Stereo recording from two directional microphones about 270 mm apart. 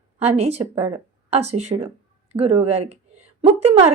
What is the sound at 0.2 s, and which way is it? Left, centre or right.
Speech, right.